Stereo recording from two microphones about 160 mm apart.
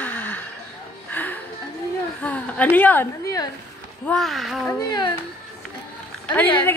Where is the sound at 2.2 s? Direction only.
10° left (ahead or behind).